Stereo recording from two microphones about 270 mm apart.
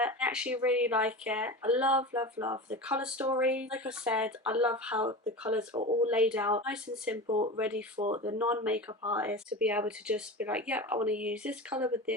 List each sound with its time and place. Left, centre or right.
0.0 s speech: centre
5.7 s speech: right
6.1 s speech: centre
7.3 s speech: right
7.5 s speech: centre
7.9 s speech: right
8.2 s speech: centre